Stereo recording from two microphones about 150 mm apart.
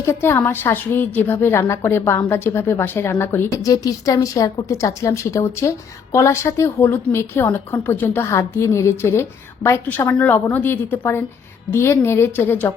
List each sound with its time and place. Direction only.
0.0 s a woman's voice: 15° left (ahead or behind)